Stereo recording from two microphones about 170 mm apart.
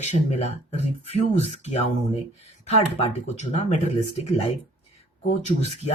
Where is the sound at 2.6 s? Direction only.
40° left (ahead or behind).